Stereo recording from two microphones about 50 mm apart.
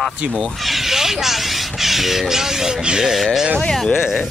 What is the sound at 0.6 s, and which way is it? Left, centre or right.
Speech, centre.